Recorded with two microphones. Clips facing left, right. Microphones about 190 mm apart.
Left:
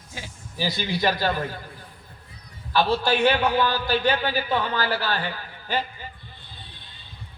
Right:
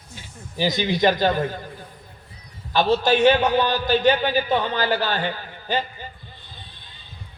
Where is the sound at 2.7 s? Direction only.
20° right (ahead or behind).